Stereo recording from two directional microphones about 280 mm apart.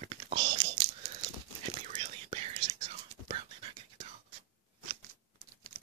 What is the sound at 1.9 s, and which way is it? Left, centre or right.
Whispering, right.